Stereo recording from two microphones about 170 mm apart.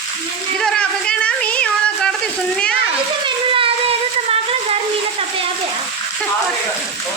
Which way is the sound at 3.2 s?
30° right (ahead or behind).